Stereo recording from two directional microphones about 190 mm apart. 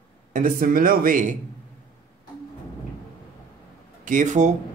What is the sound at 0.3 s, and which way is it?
Speech, 45° right (ahead or behind).